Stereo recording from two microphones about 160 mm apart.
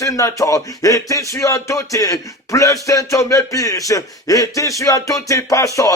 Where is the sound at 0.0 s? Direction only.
20° left (ahead or behind).